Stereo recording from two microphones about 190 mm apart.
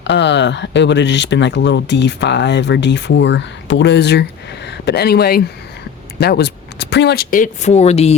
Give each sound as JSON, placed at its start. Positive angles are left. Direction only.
{"t": 0.0, "sound": "speech", "side_deg": 65}